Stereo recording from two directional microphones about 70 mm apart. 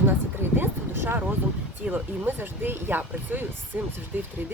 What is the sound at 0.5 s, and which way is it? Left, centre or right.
Vehicle, right.